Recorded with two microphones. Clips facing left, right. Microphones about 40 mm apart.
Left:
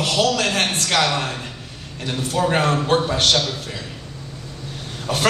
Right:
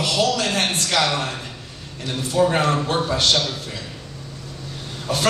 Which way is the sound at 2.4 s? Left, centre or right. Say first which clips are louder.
Right 1 dB; left.